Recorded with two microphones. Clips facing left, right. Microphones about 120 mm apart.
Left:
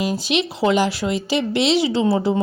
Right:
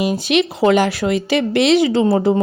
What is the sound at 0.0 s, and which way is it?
Speech, 60° right (ahead or behind).